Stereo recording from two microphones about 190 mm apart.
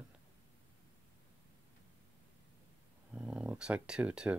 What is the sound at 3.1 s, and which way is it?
Speech, 5° right (ahead or behind).